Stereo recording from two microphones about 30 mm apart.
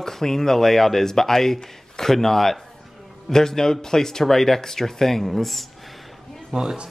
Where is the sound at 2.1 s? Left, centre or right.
Centre.